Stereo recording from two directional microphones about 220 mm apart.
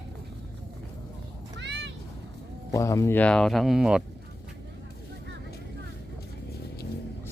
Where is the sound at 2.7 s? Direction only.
15° left (ahead or behind); by 4.0 s centre (ahead or behind).